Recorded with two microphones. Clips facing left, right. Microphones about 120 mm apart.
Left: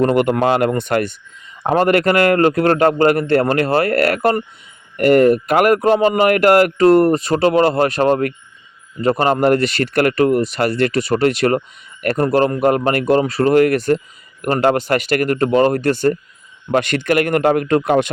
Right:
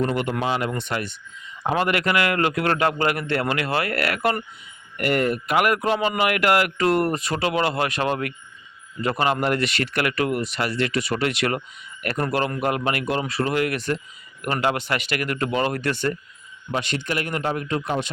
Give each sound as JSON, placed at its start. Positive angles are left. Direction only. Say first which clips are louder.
{"t": 0.0, "sound": "speech", "louder": "left 9 dB", "side_deg": 55}
{"t": 16.7, "sound": "speech", "louder": "left 10 dB", "side_deg": 60}